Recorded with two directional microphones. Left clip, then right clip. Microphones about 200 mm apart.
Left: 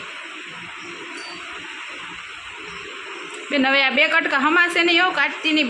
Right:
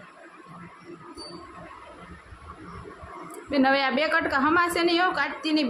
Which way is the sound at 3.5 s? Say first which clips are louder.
Left 4 dB; centre (ahead or behind).